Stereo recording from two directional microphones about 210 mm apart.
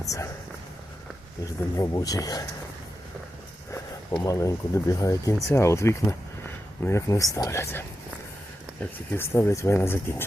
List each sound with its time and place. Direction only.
0.0 s speech: 15° left (ahead or behind)
1.7 s speech: 15° left (ahead or behind)
3.7 s speech: 15° left (ahead or behind)